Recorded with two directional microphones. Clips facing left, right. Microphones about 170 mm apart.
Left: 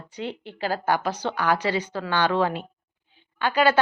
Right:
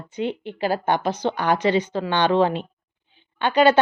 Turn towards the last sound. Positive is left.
turn(degrees=-25)  # may be behind; listen again after turning